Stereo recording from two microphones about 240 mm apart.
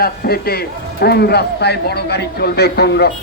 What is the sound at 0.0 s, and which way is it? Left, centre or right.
Speech, left.